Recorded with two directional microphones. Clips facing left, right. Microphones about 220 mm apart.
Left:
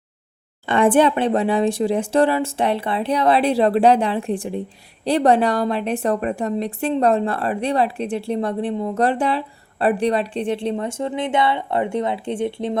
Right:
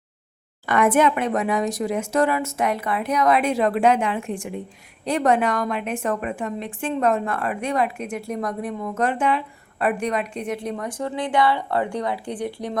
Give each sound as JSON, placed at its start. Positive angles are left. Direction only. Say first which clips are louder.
{"t": 0.7, "sound": "a woman's voice", "louder": "left 3 dB", "side_deg": 30}